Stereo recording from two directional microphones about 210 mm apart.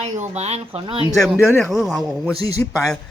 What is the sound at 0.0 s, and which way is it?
Speech, 30° right (ahead or behind).